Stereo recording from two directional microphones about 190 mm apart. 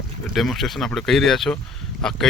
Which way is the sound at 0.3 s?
Centre (ahead or behind).